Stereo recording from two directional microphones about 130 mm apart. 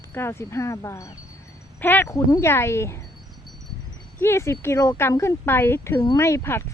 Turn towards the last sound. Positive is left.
turn(degrees=20)  # may be behind; listen again after turning